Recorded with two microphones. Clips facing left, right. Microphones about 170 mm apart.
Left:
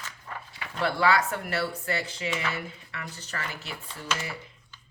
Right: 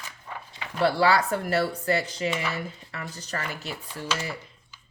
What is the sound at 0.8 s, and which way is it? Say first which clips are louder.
Speech: right 3 dB; 35° right (ahead or behind).